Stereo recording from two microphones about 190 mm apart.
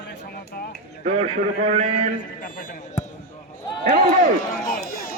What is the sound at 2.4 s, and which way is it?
Speech, 50° left (ahead or behind).